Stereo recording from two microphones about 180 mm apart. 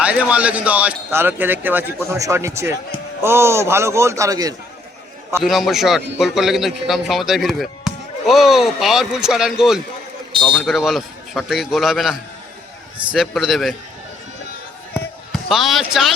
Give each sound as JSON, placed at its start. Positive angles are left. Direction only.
{"t": 0.0, "sound": "speech", "side_deg": -5}
{"t": 5.4, "sound": "a man's voice", "side_deg": 0}
{"t": 13.1, "sound": "a man's voice", "side_deg": 0}
{"t": 15.3, "sound": "basketball bounce", "side_deg": 0}